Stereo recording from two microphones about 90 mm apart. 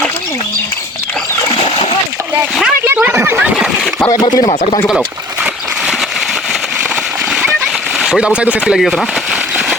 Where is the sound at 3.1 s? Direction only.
30° right (ahead or behind).